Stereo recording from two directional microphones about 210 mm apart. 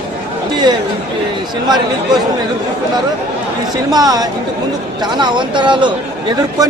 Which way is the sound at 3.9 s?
20° right (ahead or behind).